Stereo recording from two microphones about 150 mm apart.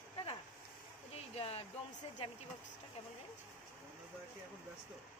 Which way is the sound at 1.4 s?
40° left (ahead or behind).